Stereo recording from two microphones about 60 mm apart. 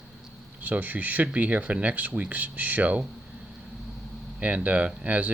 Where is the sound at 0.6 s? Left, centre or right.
Right.